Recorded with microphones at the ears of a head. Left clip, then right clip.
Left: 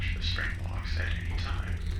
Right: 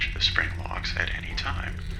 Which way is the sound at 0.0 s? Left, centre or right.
Right.